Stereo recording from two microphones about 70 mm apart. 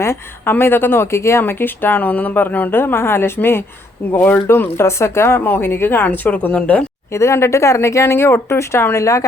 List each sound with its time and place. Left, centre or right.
0.0 s a woman's voice: left
7.1 s speech: left